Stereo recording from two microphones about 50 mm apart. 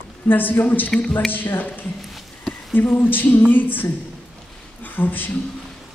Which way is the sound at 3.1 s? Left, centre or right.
Left.